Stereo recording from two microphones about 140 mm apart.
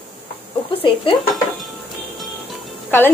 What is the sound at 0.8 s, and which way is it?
Speech, 35° left (ahead or behind).